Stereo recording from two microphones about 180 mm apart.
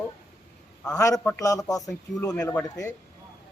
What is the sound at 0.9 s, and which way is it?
Speech, 20° left (ahead or behind).